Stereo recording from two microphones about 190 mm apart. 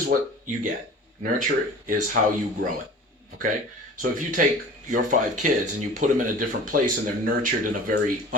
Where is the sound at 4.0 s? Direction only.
45° right (ahead or behind).